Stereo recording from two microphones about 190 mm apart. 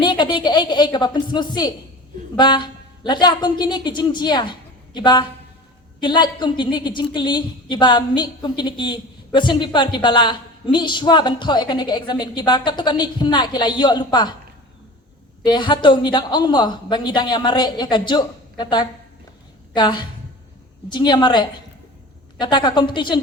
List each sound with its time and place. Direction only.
0.0 s a woman's voice: 25° left (ahead or behind)
15.4 s a woman's voice: 25° left (ahead or behind)